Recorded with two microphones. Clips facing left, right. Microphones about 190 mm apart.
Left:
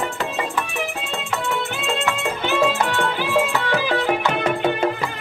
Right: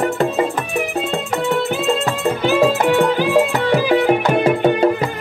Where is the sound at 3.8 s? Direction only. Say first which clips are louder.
Right 7 dB; 15° right (ahead or behind).